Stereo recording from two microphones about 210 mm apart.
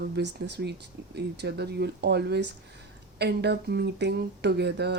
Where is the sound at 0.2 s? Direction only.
55° right (ahead or behind).